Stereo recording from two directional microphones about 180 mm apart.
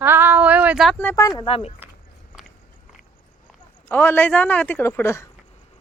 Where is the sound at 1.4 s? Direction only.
30° left (ahead or behind).